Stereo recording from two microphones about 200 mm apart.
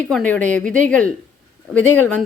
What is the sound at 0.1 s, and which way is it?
Speech, 5° left (ahead or behind).